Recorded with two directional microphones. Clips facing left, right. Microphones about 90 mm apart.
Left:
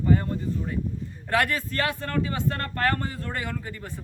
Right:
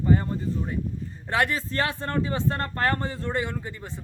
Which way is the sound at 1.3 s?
25° right (ahead or behind).